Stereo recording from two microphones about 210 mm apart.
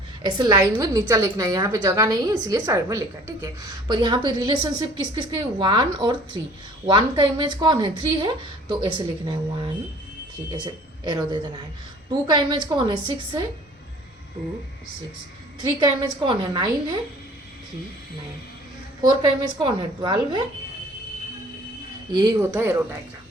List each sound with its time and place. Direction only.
0.2 s a woman's voice: 20° right (ahead or behind)
11.0 s a woman's voice: 20° right (ahead or behind)
15.8 s a woman's voice: 20° right (ahead or behind)
19.0 s a woman's voice: 20° right (ahead or behind)
22.1 s a woman's voice: 15° right (ahead or behind)